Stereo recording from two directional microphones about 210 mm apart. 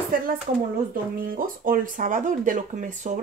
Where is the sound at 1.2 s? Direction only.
40° right (ahead or behind).